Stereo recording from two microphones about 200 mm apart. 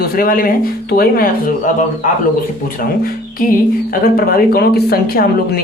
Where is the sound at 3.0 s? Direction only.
45° left (ahead or behind).